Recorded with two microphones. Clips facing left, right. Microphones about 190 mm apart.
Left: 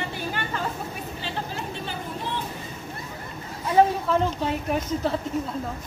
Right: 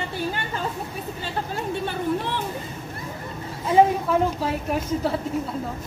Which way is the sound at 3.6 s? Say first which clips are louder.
Right 2 dB; 10° right (ahead or behind).